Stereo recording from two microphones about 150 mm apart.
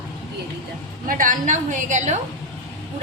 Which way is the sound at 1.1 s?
65° right (ahead or behind).